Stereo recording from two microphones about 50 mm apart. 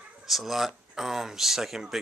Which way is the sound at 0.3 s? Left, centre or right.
Centre.